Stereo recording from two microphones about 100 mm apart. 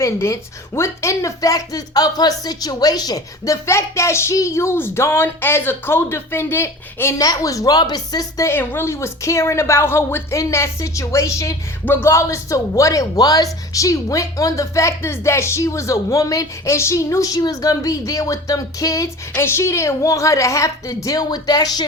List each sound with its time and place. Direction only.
0.0 s speech: 30° left (ahead or behind)
7.2 s speech: 35° left (ahead or behind)
8.4 s speech: 25° left (ahead or behind); by 21.8 s 45° left (ahead or behind)